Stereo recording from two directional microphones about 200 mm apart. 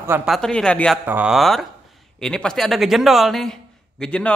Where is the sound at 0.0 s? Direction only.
10° right (ahead or behind).